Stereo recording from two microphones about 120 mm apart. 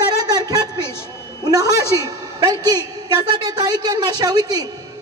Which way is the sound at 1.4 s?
30° right (ahead or behind).